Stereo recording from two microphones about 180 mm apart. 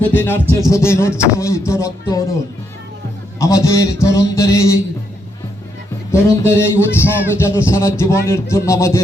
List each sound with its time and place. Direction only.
0.0 s a man's voice: 10° left (ahead or behind)
3.3 s a man's voice: 20° left (ahead or behind)
6.1 s a man's voice: 15° left (ahead or behind)